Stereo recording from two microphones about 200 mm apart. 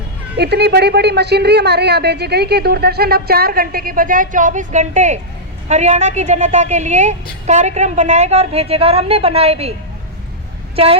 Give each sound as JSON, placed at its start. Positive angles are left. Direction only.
{"t": 0.3, "sound": "a man's voice", "side_deg": -55}
{"t": 10.8, "sound": "a woman's voice", "side_deg": -30}